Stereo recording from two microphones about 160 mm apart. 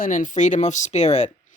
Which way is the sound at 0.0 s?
55° left (ahead or behind).